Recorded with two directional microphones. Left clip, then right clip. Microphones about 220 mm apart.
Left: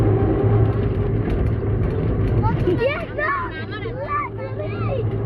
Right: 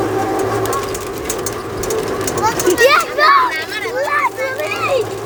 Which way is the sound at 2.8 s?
50° right (ahead or behind).